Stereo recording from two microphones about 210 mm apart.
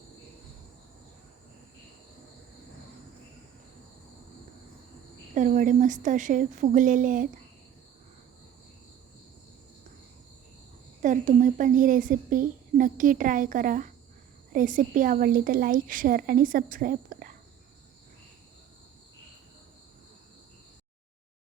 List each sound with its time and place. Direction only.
5.3 s a woman's voice: 35° right (ahead or behind)
11.0 s a woman's voice: 35° right (ahead or behind)